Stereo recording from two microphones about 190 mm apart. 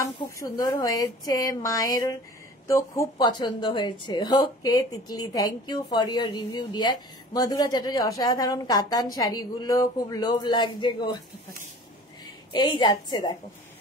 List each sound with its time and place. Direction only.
0.0 s speech: 20° left (ahead or behind)
12.5 s speech: 20° left (ahead or behind)